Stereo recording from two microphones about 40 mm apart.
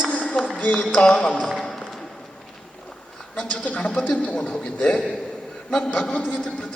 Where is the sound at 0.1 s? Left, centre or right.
Left.